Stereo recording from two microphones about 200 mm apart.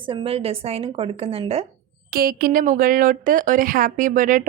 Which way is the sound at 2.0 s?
50° right (ahead or behind).